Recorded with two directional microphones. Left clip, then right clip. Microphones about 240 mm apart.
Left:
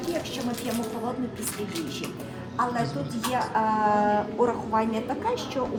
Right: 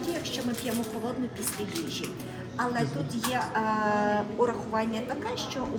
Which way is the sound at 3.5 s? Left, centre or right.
Centre.